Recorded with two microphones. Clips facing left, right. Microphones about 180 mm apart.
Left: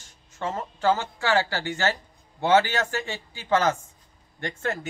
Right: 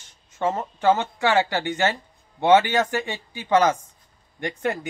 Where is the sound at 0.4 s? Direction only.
20° right (ahead or behind).